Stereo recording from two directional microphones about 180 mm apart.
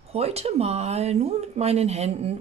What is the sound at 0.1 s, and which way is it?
Speech, 35° right (ahead or behind).